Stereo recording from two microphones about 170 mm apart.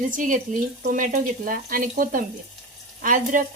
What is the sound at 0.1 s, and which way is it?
Speech, 50° right (ahead or behind).